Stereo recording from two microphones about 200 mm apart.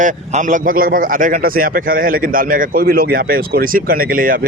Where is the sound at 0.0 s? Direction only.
40° right (ahead or behind).